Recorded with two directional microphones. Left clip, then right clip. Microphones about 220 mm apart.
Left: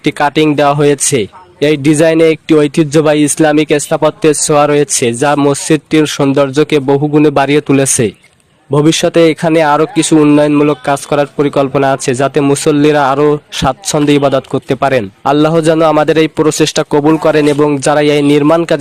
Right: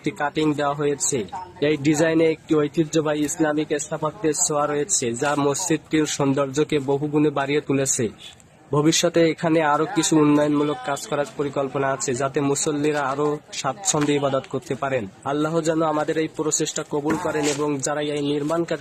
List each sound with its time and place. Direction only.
0.0 s speech: 40° left (ahead or behind)